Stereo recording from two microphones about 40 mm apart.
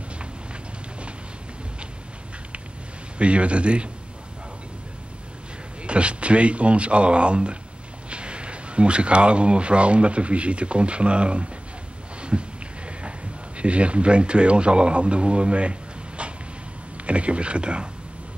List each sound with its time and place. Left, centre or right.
3.2 s a man's voice: right
5.9 s a man's voice: right
12.2 s a sound: right
13.6 s a man's voice: right
17.0 s a man's voice: right